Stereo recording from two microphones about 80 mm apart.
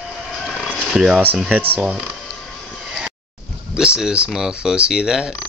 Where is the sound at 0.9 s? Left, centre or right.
Centre.